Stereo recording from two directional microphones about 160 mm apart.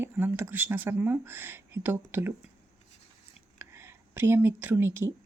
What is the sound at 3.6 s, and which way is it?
Speech, 15° right (ahead or behind).